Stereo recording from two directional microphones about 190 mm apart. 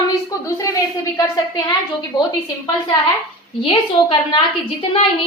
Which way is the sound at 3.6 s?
30° left (ahead or behind).